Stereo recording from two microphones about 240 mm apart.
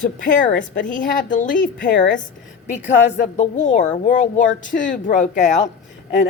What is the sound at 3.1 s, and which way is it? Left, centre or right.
Speech, left.